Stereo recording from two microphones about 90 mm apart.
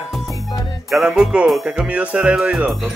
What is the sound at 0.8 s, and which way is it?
Speech, 5° right (ahead or behind).